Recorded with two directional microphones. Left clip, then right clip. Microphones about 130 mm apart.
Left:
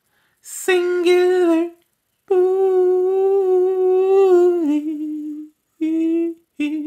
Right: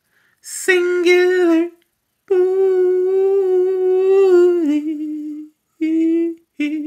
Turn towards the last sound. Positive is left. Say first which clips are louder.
# right 1 dB
turn(degrees=30)  # may be behind; listen again after turning